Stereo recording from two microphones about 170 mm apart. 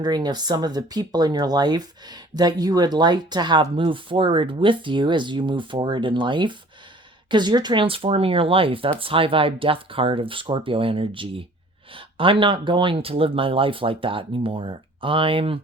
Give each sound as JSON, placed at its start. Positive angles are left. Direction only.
{"t": 0.0, "sound": "speech", "side_deg": -25}